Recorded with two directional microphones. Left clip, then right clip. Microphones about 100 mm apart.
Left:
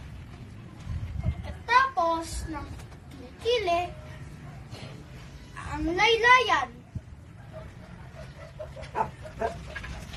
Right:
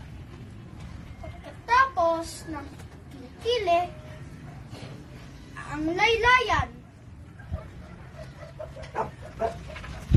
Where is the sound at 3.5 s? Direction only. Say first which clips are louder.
Right 3 dB; centre (ahead or behind).